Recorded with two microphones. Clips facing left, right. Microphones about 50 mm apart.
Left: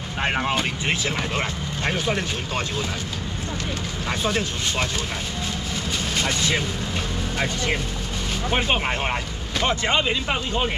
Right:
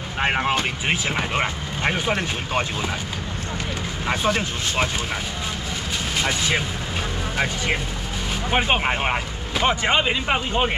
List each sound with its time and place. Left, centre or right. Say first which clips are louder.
0.2 s speech: right 2 dB; centre
4.1 s speech: right 2 dB; centre
6.1 s speech: right 1 dB; centre